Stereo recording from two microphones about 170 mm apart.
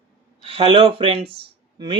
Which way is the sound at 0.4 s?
35° right (ahead or behind).